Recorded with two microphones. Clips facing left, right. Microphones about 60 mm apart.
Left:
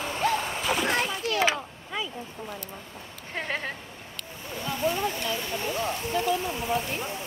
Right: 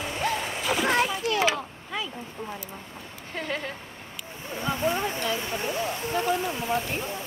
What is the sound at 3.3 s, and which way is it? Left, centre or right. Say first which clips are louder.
Speech: even; left.